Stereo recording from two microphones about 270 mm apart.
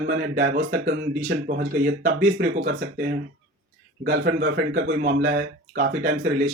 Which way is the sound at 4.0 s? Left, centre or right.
Right.